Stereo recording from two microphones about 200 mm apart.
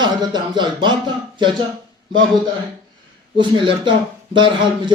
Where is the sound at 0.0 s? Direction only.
20° right (ahead or behind).